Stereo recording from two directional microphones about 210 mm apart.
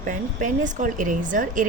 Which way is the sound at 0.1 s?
40° right (ahead or behind).